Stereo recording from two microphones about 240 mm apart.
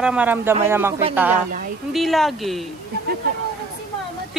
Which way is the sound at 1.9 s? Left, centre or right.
Centre.